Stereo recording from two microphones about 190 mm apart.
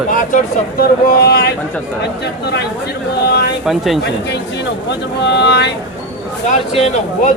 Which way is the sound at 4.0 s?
65° left (ahead or behind).